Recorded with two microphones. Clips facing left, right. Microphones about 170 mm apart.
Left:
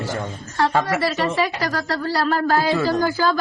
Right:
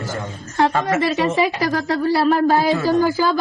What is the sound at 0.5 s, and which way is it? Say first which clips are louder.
Speech: right 2 dB; 20° right (ahead or behind).